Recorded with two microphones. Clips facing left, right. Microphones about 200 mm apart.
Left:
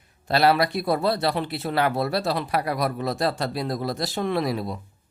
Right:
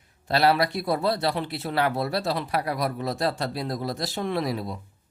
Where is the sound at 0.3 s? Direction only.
60° left (ahead or behind).